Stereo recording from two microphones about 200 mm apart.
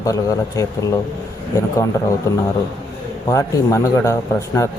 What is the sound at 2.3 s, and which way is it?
A man's voice, 15° left (ahead or behind).